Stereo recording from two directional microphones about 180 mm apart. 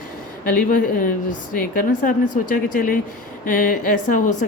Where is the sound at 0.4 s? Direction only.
50° left (ahead or behind).